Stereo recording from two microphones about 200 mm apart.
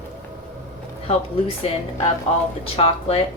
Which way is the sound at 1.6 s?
30° left (ahead or behind).